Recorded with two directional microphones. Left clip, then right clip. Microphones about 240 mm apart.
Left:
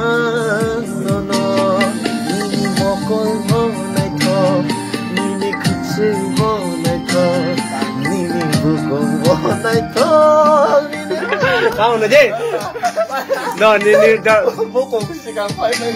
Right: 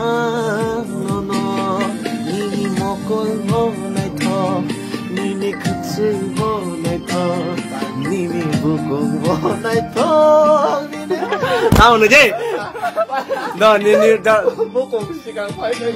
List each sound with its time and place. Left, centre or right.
0.0 s music: centre
9.3 s music: centre
11.8 s a sound: right
13.6 s speech: centre